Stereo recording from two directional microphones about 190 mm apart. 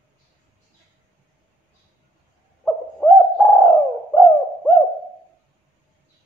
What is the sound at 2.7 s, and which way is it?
Bird, 5° left (ahead or behind).